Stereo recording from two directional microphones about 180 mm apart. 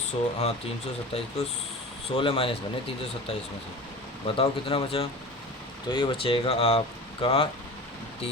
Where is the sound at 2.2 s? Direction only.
30° left (ahead or behind).